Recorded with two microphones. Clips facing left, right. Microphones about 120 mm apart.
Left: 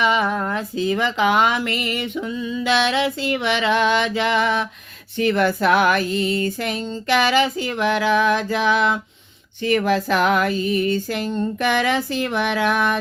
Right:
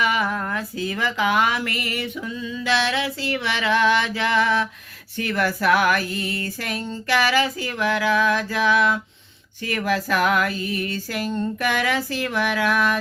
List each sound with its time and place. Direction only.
0.0 s speech: 25° left (ahead or behind)